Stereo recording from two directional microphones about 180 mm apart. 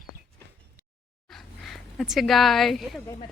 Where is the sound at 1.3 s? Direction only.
Centre (ahead or behind).